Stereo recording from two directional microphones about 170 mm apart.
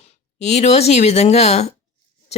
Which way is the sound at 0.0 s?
40° left (ahead or behind).